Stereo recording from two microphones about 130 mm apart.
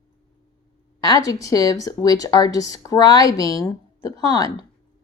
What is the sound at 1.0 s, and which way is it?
A woman's voice, 30° left (ahead or behind).